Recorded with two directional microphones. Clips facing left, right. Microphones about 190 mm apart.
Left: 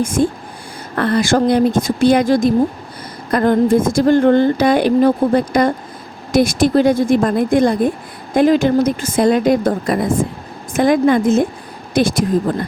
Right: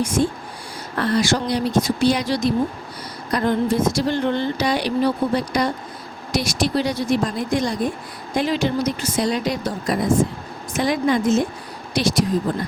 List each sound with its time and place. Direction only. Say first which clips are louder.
0.0 s a woman's voice: left 4 dB; 50° left (ahead or behind)